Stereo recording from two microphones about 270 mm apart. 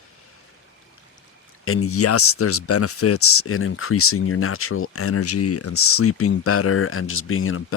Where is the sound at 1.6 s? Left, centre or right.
Left.